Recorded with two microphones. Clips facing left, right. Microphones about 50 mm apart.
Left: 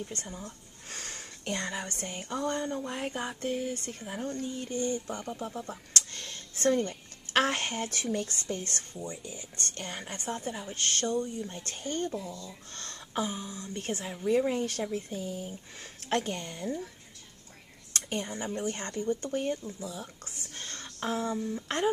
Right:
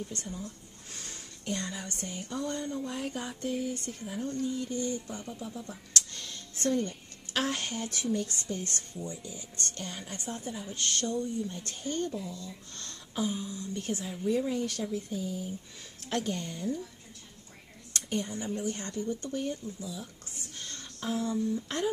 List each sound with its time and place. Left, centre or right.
0.0 s speech: left
18.4 s speech: left
20.5 s a sound: left
21.6 s speech: left